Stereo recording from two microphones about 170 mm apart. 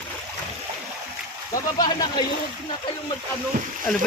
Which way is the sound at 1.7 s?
25° left (ahead or behind).